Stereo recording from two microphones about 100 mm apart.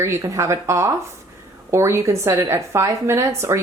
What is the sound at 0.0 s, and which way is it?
A woman's voice, 30° right (ahead or behind).